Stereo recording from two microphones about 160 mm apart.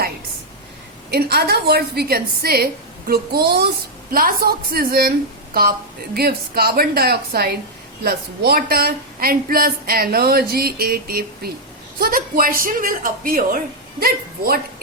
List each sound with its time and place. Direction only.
1.1 s a woman's voice: 80° right
4.1 s a woman's voice: 65° right (ahead or behind)
6.1 s a woman's voice: 75° right (ahead or behind)
14.0 s a woman's voice: 70° right (ahead or behind)